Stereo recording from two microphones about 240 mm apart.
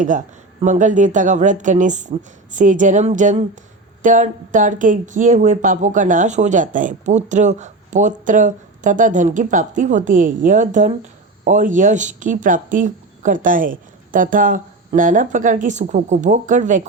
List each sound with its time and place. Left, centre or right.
0.6 s speech: right